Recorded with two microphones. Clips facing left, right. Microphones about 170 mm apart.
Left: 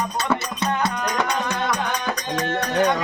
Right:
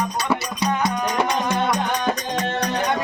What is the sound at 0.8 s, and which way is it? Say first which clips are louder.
Music: right 2 dB; 20° right (ahead or behind).